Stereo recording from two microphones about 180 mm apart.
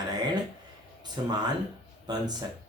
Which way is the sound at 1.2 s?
20° right (ahead or behind).